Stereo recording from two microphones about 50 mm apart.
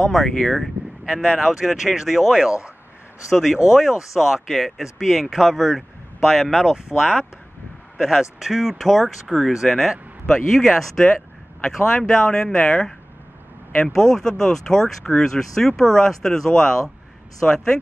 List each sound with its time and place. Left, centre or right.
0.0 s speech: centre
1.7 s speech: centre
3.7 s speech: centre
13.9 s speech: centre
17.4 s speech: left